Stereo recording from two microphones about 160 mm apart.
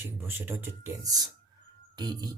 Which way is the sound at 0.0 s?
15° right (ahead or behind).